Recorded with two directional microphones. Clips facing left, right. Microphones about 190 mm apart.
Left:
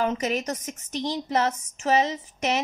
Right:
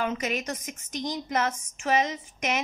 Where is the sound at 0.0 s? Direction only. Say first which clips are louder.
Left 4 dB; 35° left (ahead or behind).